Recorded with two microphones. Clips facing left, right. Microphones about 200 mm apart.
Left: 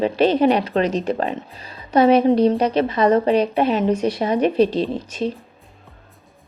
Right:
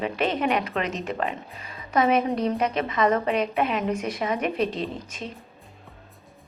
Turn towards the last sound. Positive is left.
turn(degrees=30)  # may be behind; listen again after turning